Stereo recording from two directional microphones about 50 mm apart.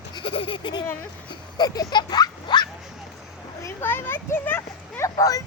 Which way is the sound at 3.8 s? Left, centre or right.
Left.